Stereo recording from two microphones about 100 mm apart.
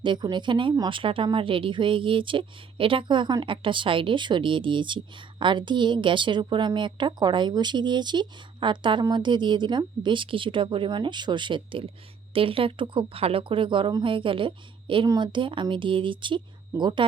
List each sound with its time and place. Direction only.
0.0 s speech: 50° right (ahead or behind)